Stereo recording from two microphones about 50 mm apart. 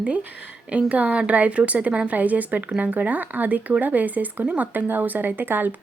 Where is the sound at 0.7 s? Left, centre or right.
Right.